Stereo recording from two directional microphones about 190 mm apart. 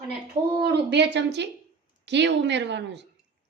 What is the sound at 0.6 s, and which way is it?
A woman's voice, 60° right (ahead or behind).